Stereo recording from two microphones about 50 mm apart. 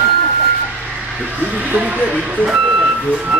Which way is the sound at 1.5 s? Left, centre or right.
Right.